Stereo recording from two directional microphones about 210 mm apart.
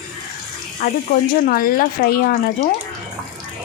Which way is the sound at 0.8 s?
40° left (ahead or behind).